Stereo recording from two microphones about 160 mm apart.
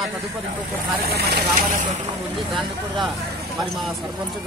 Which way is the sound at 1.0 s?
75° right (ahead or behind).